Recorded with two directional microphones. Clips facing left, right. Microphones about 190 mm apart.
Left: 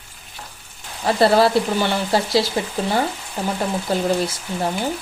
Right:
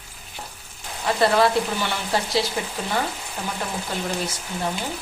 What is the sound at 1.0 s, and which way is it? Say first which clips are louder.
Speech: left 4 dB; 35° left (ahead or behind).